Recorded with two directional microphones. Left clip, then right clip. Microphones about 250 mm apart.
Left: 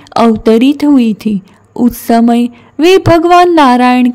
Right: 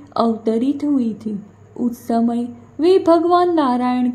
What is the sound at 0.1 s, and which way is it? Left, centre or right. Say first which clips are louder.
A woman's voice: left 11 dB; left.